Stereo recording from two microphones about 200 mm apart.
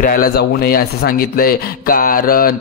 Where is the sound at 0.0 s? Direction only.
45° left (ahead or behind).